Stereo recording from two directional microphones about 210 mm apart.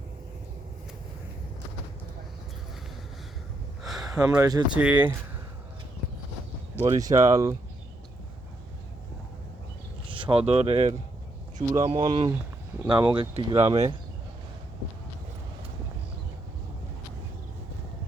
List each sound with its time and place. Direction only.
3.8 s a sound: centre (ahead or behind)
4.4 s speech: 15° right (ahead or behind)
4.7 s speech: 5° right (ahead or behind)
6.7 s speech: 15° right (ahead or behind)
10.1 s speech: 25° right (ahead or behind)